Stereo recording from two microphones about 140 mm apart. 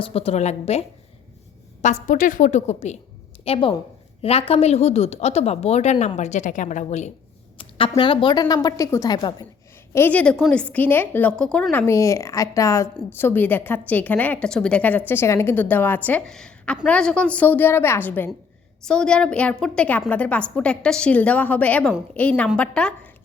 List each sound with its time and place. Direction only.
0.0 s a woman's voice: 45° left (ahead or behind)
1.8 s a woman's voice: 65° left (ahead or behind)
3.4 s a woman's voice: 40° left (ahead or behind); by 7.1 s 55° left (ahead or behind)
7.6 s a woman's voice: 40° left (ahead or behind)
9.9 s a woman's voice: 15° left (ahead or behind)